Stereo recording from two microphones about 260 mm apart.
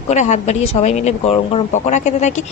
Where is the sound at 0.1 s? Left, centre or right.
Left.